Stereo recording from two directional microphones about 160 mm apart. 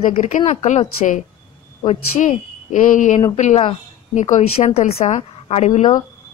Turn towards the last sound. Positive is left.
turn(degrees=50)  # may be behind; listen again after turning